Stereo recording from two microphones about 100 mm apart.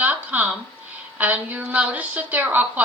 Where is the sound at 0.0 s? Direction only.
15° right (ahead or behind).